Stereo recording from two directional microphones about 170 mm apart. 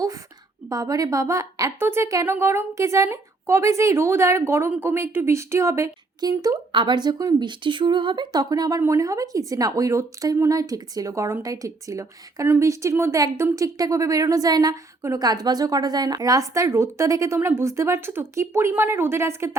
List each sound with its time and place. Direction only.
0.7 s a woman's voice: 20° right (ahead or behind)